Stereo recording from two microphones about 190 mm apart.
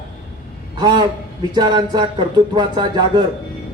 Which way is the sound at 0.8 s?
20° right (ahead or behind).